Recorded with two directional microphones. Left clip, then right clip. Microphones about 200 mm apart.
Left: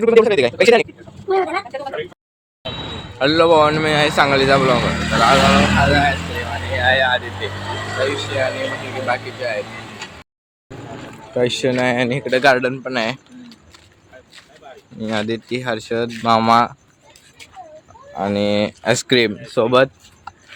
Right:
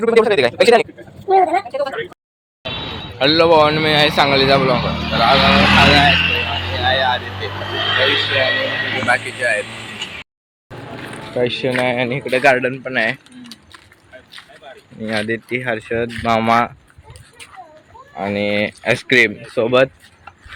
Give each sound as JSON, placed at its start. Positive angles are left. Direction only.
{"t": 0.0, "sound": "speech", "side_deg": 25}
{"t": 3.2, "sound": "speech", "side_deg": 5}
{"t": 6.1, "sound": "a sound", "side_deg": 25}
{"t": 6.8, "sound": "vehicle", "side_deg": 35}
{"t": 7.9, "sound": "a sound", "side_deg": -5}
{"t": 8.3, "sound": "vehicle", "side_deg": 0}
{"t": 11.3, "sound": "speech", "side_deg": 20}
{"t": 15.0, "sound": "speech", "side_deg": 10}
{"t": 18.2, "sound": "speech", "side_deg": 15}